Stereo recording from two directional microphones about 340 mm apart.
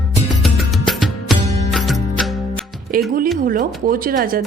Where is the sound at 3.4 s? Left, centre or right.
Right.